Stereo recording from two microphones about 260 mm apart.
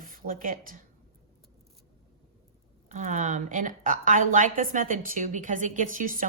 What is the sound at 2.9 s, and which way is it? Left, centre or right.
A woman's voice, right.